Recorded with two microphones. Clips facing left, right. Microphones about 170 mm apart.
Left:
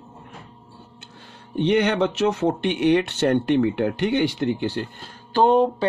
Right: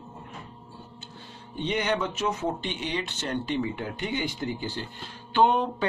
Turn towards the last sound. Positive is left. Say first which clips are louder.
# left 5 dB
turn(degrees=35)  # may be behind; listen again after turning